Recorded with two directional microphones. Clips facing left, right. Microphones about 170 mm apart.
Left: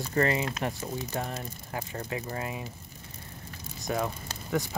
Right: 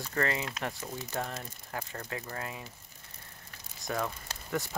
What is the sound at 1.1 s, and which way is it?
Speech, 10° left (ahead or behind).